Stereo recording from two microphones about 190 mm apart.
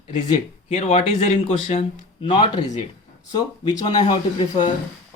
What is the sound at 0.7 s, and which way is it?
Speech, 35° left (ahead or behind).